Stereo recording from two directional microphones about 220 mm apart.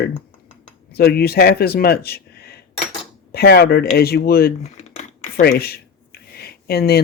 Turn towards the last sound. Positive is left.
turn(degrees=45)  # may be behind; listen again after turning